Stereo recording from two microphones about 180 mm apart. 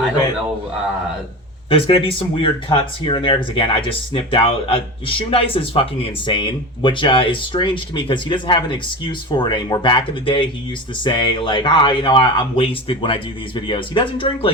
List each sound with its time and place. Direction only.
1.7 s speech: 30° left (ahead or behind)